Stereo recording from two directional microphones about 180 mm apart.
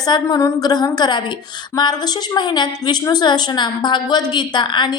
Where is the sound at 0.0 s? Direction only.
20° left (ahead or behind).